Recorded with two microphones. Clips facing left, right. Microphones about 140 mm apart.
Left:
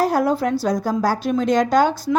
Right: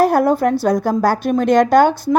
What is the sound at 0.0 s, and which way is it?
A woman's voice, 55° right (ahead or behind).